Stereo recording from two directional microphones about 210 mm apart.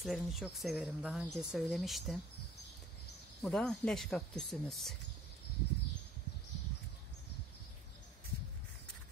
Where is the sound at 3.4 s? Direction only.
5° left (ahead or behind).